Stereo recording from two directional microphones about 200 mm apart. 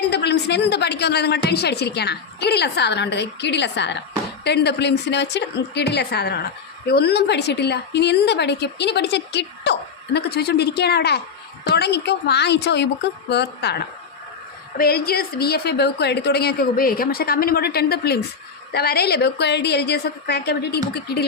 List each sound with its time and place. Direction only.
0.1 s a woman's voice: 55° left (ahead or behind)